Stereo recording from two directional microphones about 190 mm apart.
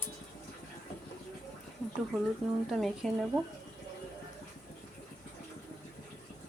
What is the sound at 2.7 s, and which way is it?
Speech, centre (ahead or behind).